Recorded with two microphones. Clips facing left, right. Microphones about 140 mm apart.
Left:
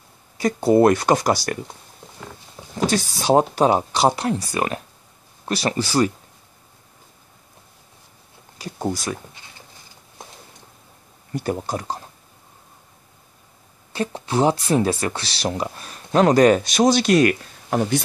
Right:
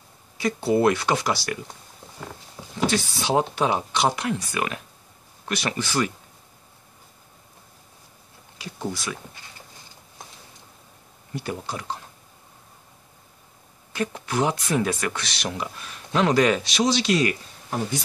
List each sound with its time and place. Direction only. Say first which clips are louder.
0.4 s speech: left 6 dB; 45° left (ahead or behind)
2.9 s speech: left 7 dB; 40° left (ahead or behind)
8.5 s speech: left 5 dB; 40° left (ahead or behind)
11.3 s speech: left 6 dB; 45° left (ahead or behind)
13.9 s speech: left 3 dB; 30° left (ahead or behind); by 18.0 s 75° left (ahead or behind)